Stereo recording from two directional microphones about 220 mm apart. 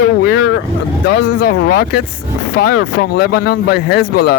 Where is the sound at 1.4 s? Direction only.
45° left (ahead or behind).